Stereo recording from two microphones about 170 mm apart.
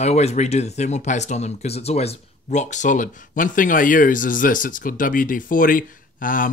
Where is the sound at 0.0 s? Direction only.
40° left (ahead or behind).